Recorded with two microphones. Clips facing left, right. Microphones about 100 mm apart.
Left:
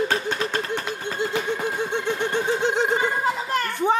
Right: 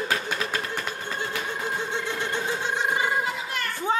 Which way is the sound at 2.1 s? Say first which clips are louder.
Left 5 dB; 15° left (ahead or behind).